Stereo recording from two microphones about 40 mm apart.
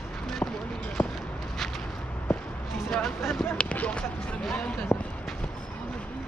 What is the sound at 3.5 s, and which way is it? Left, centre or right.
Basketball bounce, left.